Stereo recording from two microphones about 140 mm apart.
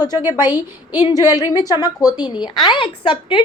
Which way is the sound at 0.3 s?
30° left (ahead or behind).